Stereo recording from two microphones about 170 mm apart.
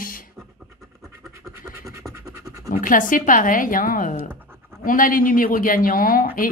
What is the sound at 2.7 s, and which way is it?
A woman's voice, 55° left (ahead or behind).